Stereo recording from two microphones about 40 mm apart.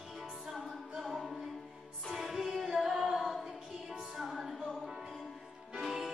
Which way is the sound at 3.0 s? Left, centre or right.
Centre.